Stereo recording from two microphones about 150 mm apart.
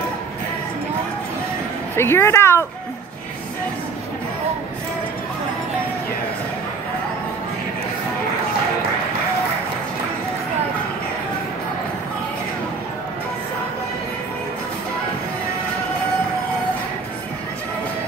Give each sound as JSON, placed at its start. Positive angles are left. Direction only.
{"t": 2.0, "sound": "a woman's voice", "side_deg": 15}